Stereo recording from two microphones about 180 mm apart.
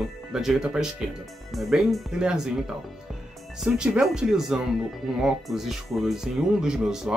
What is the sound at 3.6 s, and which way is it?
Speech, centre (ahead or behind).